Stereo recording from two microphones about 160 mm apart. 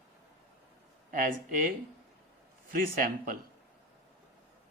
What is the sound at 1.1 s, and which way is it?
A man's voice, 60° right (ahead or behind).